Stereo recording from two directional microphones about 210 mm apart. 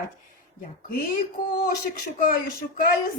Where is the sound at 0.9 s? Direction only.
45° left (ahead or behind).